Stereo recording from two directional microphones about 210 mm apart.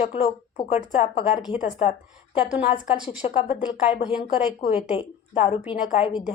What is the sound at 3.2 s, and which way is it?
Speech, 30° left (ahead or behind).